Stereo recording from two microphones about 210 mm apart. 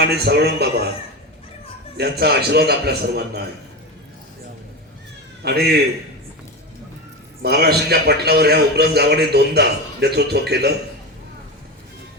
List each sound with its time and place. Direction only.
0.2 s a man's voice: 50° right (ahead or behind)
2.0 s a man's voice: 50° right (ahead or behind)
5.4 s a man's voice: 50° right (ahead or behind)
7.4 s a man's voice: 50° right (ahead or behind)